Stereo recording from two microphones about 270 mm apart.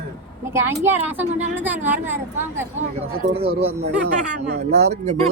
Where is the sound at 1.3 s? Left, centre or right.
Right.